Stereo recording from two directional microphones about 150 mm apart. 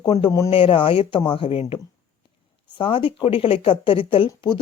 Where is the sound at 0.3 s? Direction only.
20° left (ahead or behind).